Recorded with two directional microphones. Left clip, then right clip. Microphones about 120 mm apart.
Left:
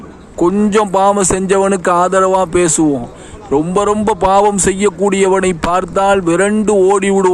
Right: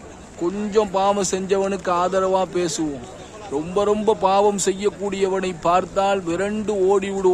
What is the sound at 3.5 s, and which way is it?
Speech, 60° left (ahead or behind).